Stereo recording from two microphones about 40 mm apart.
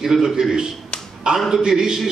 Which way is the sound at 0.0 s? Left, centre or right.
Centre.